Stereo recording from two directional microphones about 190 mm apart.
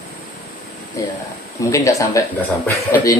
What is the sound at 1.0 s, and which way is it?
A man's voice, 15° left (ahead or behind).